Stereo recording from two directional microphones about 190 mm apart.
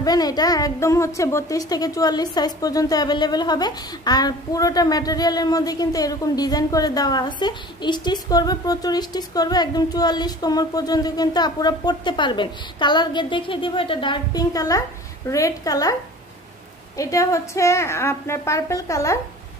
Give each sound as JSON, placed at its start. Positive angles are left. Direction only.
{"t": 0.0, "sound": "a woman's voice", "side_deg": 20}